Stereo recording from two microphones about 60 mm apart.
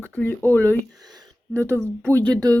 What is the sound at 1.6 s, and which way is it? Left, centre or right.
Speech, right.